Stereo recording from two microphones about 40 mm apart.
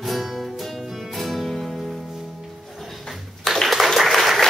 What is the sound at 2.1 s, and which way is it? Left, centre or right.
Music, centre.